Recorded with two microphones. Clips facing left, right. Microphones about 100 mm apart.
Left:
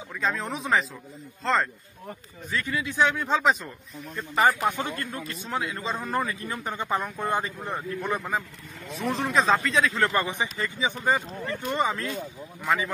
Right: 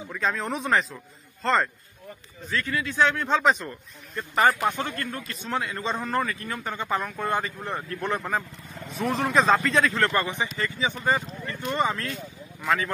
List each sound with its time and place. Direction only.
0.1 s speech: centre (ahead or behind)
2.5 s speech: 15° left (ahead or behind)
3.4 s speech: centre (ahead or behind)
4.6 s speech: 15° left (ahead or behind)
5.4 s speech: 5° left (ahead or behind)
6.1 s speech: 15° left (ahead or behind)
8.1 s speech: centre (ahead or behind)
10.1 s speech: 15° left (ahead or behind)